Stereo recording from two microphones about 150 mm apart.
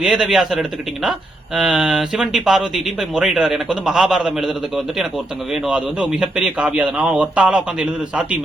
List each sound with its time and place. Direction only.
0.0 s a man's voice: 5° right (ahead or behind)